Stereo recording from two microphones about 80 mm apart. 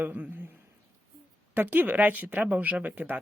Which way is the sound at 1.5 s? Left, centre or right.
Right.